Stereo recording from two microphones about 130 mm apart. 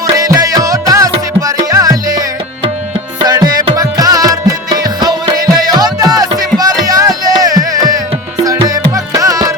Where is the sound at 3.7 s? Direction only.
30° right (ahead or behind).